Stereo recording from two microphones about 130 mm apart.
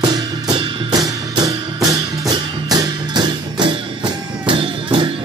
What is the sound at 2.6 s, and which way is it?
Music, 30° right (ahead or behind).